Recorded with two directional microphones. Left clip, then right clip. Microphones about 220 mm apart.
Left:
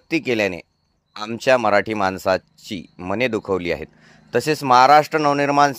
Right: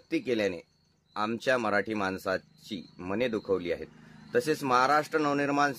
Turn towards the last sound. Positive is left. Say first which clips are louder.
# left 11 dB
turn(degrees=40)  # may be behind; listen again after turning